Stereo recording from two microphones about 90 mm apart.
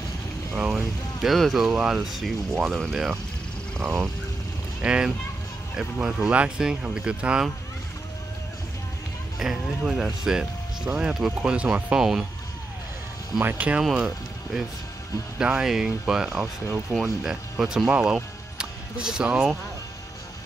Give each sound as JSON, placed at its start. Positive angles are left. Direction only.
{"t": 0.6, "sound": "speech", "side_deg": -5}
{"t": 3.8, "sound": "speech", "side_deg": -30}
{"t": 4.8, "sound": "speech", "side_deg": -10}
{"t": 9.4, "sound": "speech", "side_deg": -5}
{"t": 13.4, "sound": "speech", "side_deg": -20}
{"t": 13.9, "sound": "speech", "side_deg": -5}